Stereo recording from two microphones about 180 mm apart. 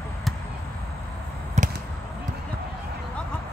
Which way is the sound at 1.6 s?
40° right (ahead or behind).